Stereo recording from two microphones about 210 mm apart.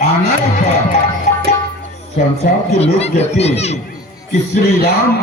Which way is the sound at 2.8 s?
30° left (ahead or behind).